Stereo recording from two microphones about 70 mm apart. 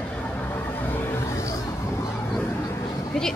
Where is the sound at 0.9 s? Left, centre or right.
Left.